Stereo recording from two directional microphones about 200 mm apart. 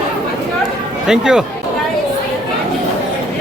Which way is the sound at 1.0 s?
5° right (ahead or behind).